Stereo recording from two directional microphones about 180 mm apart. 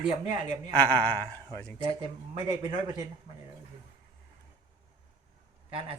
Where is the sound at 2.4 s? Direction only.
20° right (ahead or behind).